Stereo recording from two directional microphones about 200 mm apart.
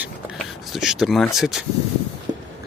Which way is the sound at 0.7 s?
Centre (ahead or behind).